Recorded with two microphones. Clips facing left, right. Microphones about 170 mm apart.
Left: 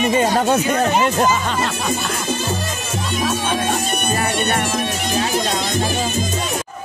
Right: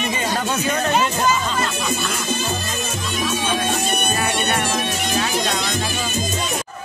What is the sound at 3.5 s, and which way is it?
Music, 45° left (ahead or behind).